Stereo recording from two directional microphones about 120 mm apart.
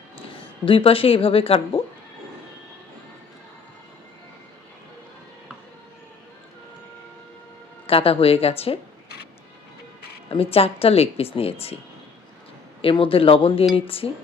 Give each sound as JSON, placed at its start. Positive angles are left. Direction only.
{"t": 0.2, "sound": "a woman's voice", "side_deg": 45}
{"t": 7.9, "sound": "speech", "side_deg": 50}
{"t": 10.2, "sound": "speech", "side_deg": 55}
{"t": 12.8, "sound": "speech", "side_deg": 45}